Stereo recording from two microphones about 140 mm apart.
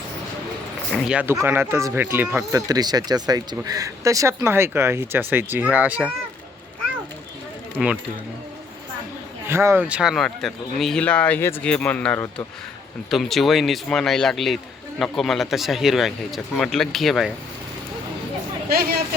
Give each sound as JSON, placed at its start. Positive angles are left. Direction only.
{"t": 0.9, "sound": "speech", "side_deg": -5}
{"t": 2.5, "sound": "speech", "side_deg": -25}
{"t": 7.8, "sound": "speech", "side_deg": -5}
{"t": 9.5, "sound": "speech", "side_deg": -20}
{"t": 13.1, "sound": "speech", "side_deg": 0}
{"t": 18.7, "sound": "speech", "side_deg": -90}